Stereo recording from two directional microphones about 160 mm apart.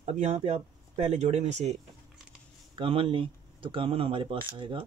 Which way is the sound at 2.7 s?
35° right (ahead or behind).